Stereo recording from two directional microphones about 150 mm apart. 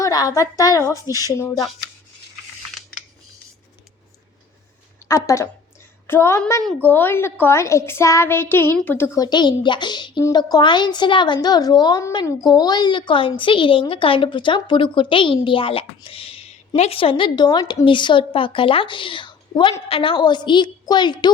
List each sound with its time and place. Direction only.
0.0 s a woman's voice: 25° left (ahead or behind)
5.0 s a woman's voice: 20° left (ahead or behind)
9.2 s a woman's voice: 30° left (ahead or behind)